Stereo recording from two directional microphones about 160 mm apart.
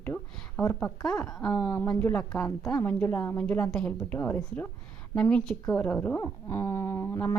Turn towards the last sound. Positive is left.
turn(degrees=15)  # may be behind; listen again after turning